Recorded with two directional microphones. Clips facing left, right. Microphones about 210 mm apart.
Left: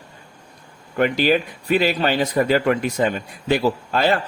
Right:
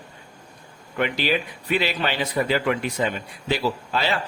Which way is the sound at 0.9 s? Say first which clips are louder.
Left 6 dB; 45° left (ahead or behind).